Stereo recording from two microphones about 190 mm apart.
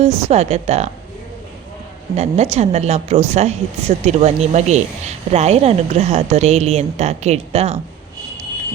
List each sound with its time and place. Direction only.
0.0 s speech: 35° right (ahead or behind)
2.1 s speech: 35° right (ahead or behind)